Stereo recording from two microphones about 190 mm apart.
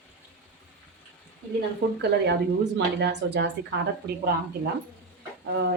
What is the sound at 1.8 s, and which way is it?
A woman's voice, 60° right (ahead or behind).